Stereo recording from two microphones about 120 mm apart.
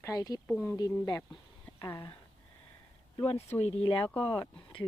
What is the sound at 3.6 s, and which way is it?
Speech, 60° left (ahead or behind).